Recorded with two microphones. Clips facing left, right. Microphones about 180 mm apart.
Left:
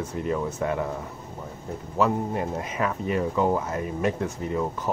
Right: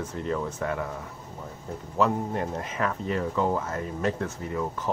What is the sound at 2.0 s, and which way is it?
Speech, 5° left (ahead or behind).